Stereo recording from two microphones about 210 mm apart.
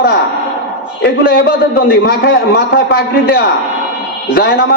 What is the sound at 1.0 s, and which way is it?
A man's voice, 45° left (ahead or behind).